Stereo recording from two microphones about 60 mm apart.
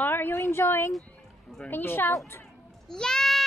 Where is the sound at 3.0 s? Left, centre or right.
Centre.